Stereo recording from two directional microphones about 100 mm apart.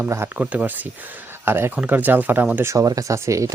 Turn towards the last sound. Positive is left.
turn(degrees=-30)  # may be behind; listen again after turning